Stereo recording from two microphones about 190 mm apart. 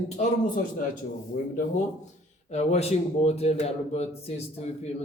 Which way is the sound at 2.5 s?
35° left (ahead or behind).